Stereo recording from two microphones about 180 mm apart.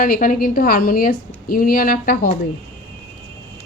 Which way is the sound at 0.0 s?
50° left (ahead or behind).